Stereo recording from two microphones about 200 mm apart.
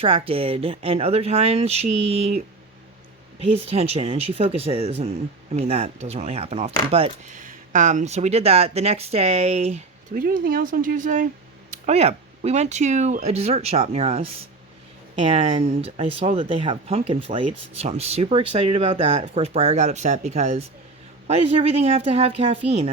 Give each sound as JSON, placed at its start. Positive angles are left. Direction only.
{"t": 0.0, "sound": "speech", "side_deg": -30}
{"t": 3.5, "sound": "speech", "side_deg": -30}
{"t": 10.2, "sound": "speech", "side_deg": -45}